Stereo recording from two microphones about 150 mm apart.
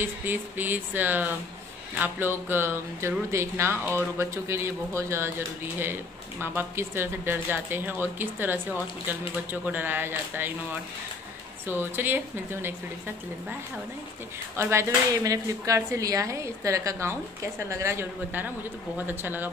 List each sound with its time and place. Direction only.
0.0 s speech: 15° right (ahead or behind)
6.4 s speech: 15° right (ahead or behind)
14.6 s speech: 20° right (ahead or behind)